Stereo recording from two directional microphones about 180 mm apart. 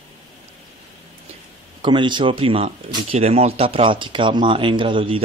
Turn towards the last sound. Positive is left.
turn(degrees=-30)  # may be behind; listen again after turning